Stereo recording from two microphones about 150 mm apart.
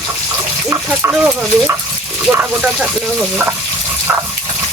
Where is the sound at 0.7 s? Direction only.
15° right (ahead or behind).